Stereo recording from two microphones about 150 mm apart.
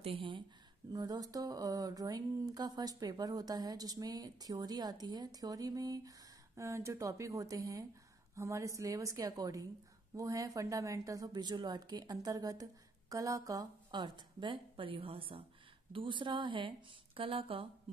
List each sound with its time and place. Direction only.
0.0 s a woman's voice: 35° right (ahead or behind)
0.9 s a woman's voice: 25° right (ahead or behind)